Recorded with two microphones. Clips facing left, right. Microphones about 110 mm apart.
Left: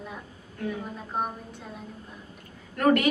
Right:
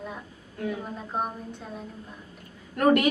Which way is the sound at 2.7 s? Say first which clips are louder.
Right 1 dB; 15° right (ahead or behind).